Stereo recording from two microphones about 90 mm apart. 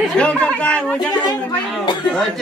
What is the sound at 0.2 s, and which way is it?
Speech, 15° left (ahead or behind).